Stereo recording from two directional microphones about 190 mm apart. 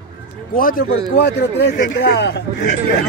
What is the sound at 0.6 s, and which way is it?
A man's voice, 50° left (ahead or behind).